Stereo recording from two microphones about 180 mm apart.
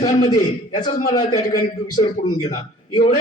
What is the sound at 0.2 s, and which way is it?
A man's voice, 25° left (ahead or behind).